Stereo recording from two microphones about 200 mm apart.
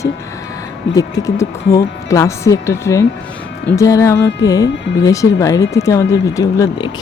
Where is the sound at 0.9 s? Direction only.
15° left (ahead or behind).